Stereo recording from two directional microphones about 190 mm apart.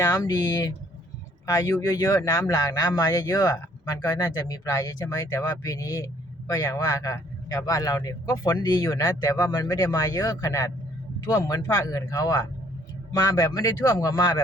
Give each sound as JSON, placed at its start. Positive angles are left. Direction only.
{"t": 0.0, "sound": "a man's voice", "side_deg": 15}